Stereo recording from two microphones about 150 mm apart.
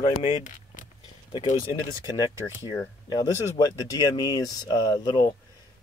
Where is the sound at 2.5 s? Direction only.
25° left (ahead or behind).